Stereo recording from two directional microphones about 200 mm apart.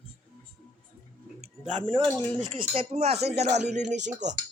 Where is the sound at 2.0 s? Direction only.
10° left (ahead or behind).